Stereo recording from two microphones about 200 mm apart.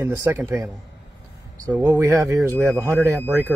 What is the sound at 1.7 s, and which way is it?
Speech, 10° right (ahead or behind).